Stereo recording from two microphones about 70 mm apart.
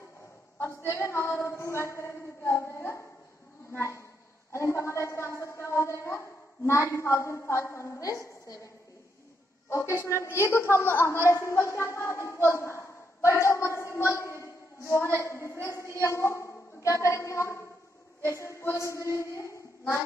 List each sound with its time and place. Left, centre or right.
0.6 s a woman's voice: left
9.7 s a woman's voice: left